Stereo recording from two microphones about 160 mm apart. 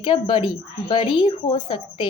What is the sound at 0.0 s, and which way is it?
A woman's voice, 30° left (ahead or behind).